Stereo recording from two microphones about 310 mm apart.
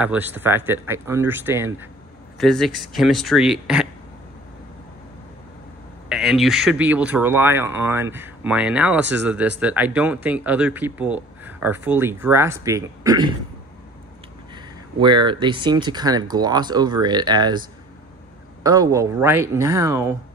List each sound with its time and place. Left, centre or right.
0.0 s speech: centre
6.0 s speech: centre
14.5 s speech: centre
18.6 s speech: centre